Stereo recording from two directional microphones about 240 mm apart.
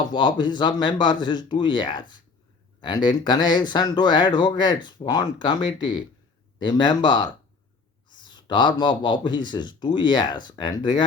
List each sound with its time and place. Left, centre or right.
0.1 s speech: centre